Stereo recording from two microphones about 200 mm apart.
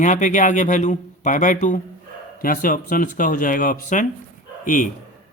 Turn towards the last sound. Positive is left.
turn(degrees=40)  # may be behind; listen again after turning